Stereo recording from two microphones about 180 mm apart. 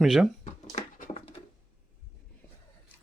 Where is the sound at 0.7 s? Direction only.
45° left (ahead or behind).